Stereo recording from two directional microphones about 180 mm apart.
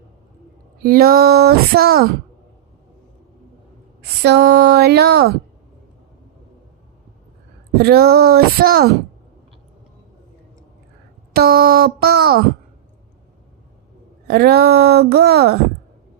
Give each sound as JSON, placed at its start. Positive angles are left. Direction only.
{"t": 0.8, "sound": "speech", "side_deg": -55}
{"t": 4.0, "sound": "speech", "side_deg": -65}
{"t": 7.8, "sound": "speech", "side_deg": -60}
{"t": 11.3, "sound": "speech", "side_deg": -60}
{"t": 14.3, "sound": "speech", "side_deg": -65}